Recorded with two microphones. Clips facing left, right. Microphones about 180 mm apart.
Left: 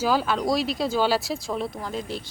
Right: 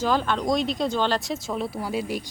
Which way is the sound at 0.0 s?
5° left (ahead or behind).